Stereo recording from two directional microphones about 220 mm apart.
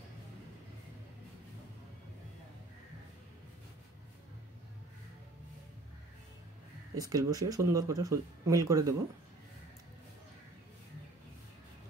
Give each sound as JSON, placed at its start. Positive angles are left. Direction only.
{"t": 7.0, "sound": "speech", "side_deg": -15}